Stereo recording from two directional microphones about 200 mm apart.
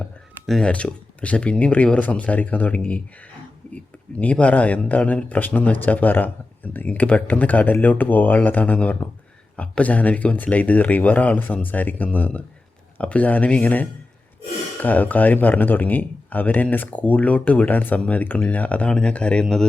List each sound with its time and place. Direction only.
0.4 s speech: 5° left (ahead or behind)